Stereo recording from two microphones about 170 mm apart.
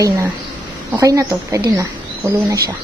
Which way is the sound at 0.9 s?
20° right (ahead or behind).